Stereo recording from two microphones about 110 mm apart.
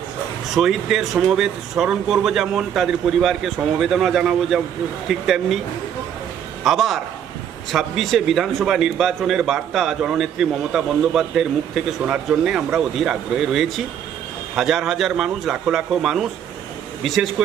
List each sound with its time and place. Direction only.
0.5 s a man's voice: centre (ahead or behind)
6.7 s a man's voice: centre (ahead or behind)